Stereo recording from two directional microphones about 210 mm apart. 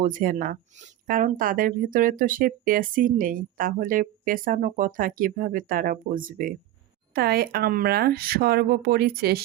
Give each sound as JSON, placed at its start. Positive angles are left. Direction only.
{"t": 0.0, "sound": "speech", "side_deg": -40}